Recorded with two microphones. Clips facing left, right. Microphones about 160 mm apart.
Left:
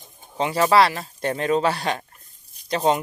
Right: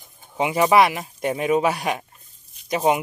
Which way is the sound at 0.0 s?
20° left (ahead or behind).